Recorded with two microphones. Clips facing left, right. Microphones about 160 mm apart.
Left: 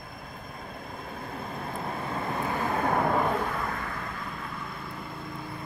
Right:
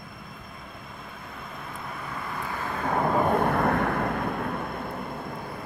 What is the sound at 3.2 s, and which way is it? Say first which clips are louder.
Vehicle: right 6 dB; 55° right (ahead or behind).